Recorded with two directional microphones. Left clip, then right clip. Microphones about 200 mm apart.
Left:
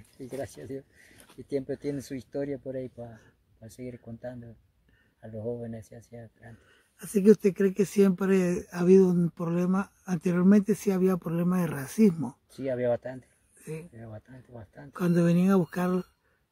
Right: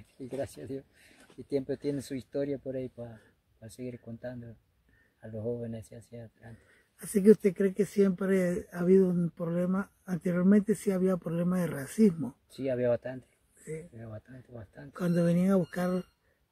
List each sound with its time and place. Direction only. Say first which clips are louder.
0.2 s speech: even; centre (ahead or behind)
7.2 s speech: left 2 dB; 20° left (ahead or behind)
12.5 s speech: left 1 dB; centre (ahead or behind)
14.9 s speech: left 3 dB; 30° left (ahead or behind)